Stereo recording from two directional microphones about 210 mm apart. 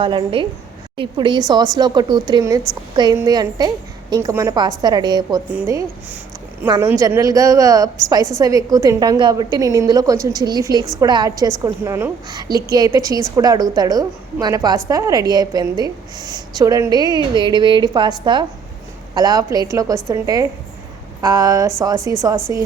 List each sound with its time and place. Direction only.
0.0 s a woman's voice: 25° right (ahead or behind)